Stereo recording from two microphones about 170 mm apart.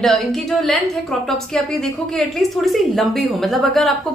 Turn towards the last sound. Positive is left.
turn(degrees=0)  # may be behind; listen again after turning